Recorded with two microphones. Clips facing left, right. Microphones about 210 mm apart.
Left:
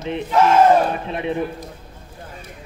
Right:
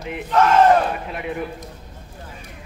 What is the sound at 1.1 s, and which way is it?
Speech, 25° left (ahead or behind).